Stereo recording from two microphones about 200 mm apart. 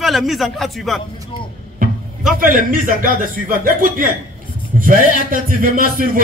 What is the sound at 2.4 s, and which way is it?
A man's voice, 45° right (ahead or behind).